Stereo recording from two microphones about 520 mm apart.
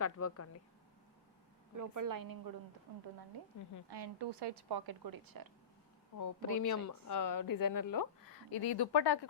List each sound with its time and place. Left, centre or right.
0.0 s a woman's voice: left
1.7 s a woman's voice: right
6.1 s speech: left